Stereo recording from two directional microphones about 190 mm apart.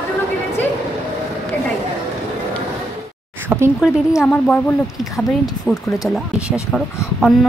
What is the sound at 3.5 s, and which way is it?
Speech, 10° right (ahead or behind).